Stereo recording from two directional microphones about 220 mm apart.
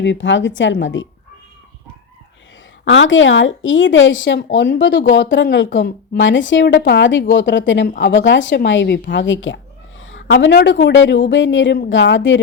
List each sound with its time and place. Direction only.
0.0 s speech: 55° left (ahead or behind)
2.8 s speech: 60° left (ahead or behind)